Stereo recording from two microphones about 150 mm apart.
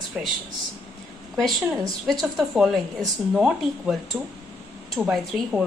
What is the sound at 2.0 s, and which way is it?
Speech, centre (ahead or behind).